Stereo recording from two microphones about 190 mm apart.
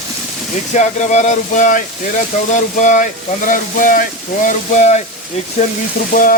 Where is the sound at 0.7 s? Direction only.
40° left (ahead or behind).